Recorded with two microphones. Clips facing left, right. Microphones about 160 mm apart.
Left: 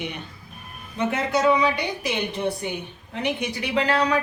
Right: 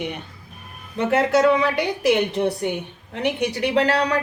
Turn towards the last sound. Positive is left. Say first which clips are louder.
# right 4 dB
turn(degrees=-75)  # may be behind; listen again after turning